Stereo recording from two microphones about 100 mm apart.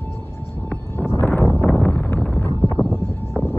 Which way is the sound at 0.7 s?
20° left (ahead or behind).